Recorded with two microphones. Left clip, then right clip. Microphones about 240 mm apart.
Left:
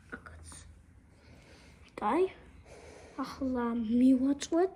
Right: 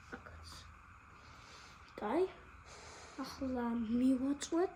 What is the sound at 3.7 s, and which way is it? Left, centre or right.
Speech, left.